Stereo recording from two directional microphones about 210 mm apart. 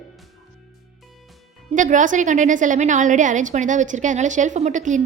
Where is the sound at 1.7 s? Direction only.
40° right (ahead or behind).